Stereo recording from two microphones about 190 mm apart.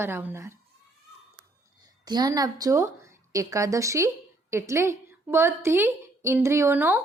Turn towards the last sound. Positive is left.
turn(degrees=-10)  # may be behind; listen again after turning